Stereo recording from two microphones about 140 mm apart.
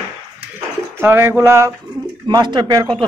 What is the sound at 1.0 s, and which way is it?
Speech, 15° right (ahead or behind).